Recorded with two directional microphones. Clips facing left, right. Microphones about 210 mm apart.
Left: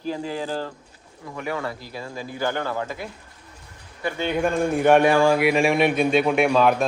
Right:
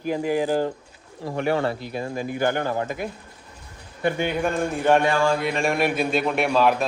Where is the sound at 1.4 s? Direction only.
30° right (ahead or behind).